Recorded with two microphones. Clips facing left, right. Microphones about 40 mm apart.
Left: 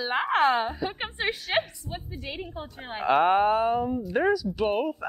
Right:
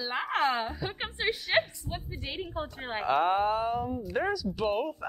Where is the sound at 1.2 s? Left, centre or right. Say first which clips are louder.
Left 1 dB; left.